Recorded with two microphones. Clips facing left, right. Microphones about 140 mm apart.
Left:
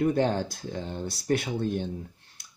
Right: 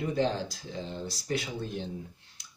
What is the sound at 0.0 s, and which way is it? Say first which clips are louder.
Speech: left 5 dB; 55° left (ahead or behind).